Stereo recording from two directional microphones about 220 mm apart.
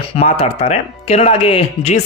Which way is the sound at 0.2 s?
25° left (ahead or behind).